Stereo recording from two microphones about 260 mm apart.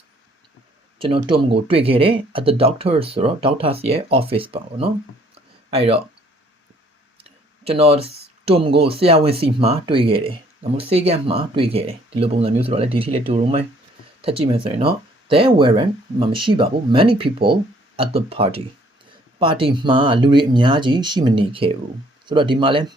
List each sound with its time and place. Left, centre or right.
0.9 s speech: centre
5.3 s a sound: right
7.6 s speech: right